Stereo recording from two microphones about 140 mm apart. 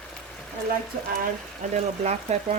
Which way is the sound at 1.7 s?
55° right (ahead or behind).